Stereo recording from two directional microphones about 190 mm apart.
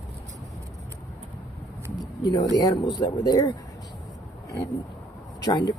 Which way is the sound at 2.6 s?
20° left (ahead or behind).